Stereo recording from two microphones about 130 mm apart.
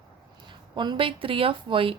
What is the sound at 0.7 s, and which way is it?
Speech, 35° right (ahead or behind).